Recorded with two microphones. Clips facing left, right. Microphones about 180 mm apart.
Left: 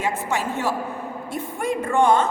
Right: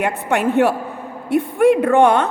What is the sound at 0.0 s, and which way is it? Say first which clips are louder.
A woman's voice: right 6 dB; 60° right (ahead or behind).